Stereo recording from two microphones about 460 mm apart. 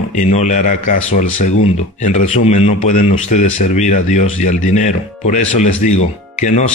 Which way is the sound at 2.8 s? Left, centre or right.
Centre.